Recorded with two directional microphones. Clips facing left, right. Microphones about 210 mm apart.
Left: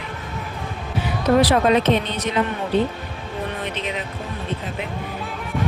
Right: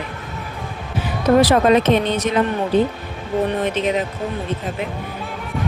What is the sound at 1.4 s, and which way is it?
Speech, 45° right (ahead or behind).